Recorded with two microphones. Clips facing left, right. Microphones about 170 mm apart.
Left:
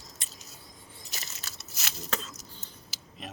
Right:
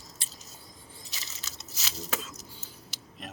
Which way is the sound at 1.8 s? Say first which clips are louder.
Left 1 dB; 55° left (ahead or behind).